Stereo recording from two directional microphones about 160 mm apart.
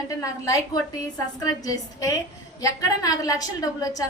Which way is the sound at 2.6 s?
20° left (ahead or behind).